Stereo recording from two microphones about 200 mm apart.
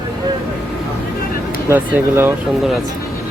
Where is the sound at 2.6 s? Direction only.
Centre (ahead or behind).